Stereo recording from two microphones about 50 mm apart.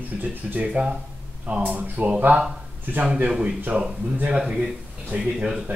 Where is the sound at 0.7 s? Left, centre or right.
Right.